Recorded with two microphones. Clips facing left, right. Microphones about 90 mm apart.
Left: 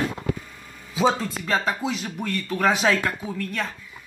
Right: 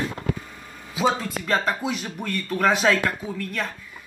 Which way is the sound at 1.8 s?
Centre (ahead or behind).